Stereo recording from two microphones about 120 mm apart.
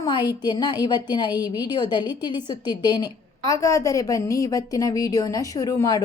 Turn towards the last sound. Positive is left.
turn(degrees=30)  # may be behind; listen again after turning